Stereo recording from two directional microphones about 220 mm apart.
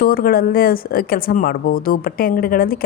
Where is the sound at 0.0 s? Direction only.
40° left (ahead or behind).